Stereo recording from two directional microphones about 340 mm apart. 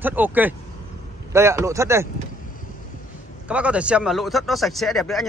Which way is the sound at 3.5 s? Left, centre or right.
Centre.